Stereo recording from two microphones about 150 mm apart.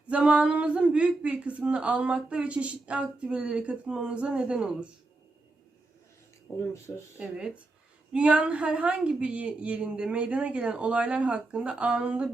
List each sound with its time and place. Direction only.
0.1 s speech: 5° right (ahead or behind)
6.5 s speech: 20° left (ahead or behind)
7.2 s speech: 5° right (ahead or behind)